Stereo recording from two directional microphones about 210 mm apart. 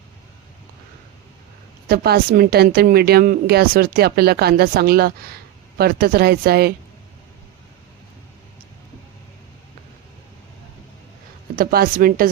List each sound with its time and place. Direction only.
1.9 s a woman's voice: 45° right (ahead or behind)
11.5 s speech: 45° right (ahead or behind)